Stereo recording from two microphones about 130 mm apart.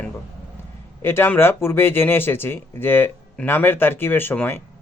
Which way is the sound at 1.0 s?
15° left (ahead or behind).